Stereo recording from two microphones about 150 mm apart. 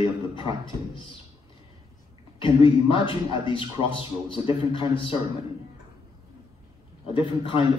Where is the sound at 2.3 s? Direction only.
35° left (ahead or behind).